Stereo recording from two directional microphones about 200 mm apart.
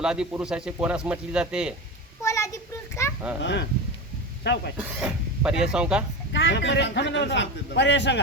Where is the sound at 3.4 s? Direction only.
60° left (ahead or behind).